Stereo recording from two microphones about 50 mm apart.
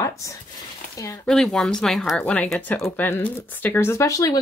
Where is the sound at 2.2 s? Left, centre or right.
Left.